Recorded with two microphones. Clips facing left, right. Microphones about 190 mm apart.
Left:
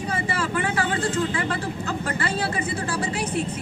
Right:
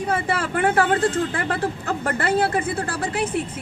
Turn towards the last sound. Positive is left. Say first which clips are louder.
# right 2 dB
turn(degrees=-55)  # may be behind; listen again after turning